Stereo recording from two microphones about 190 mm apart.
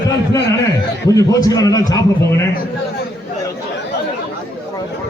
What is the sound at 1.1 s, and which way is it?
A man's voice, 20° left (ahead or behind).